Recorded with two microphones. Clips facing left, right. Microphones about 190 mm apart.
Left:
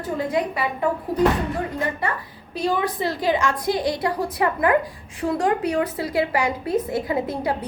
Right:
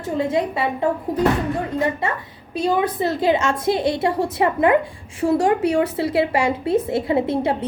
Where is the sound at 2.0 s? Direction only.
25° right (ahead or behind).